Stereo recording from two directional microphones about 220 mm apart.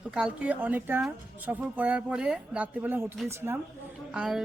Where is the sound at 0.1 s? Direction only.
5° right (ahead or behind).